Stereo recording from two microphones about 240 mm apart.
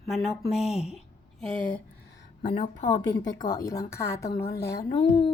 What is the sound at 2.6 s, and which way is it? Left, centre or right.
Speech, left.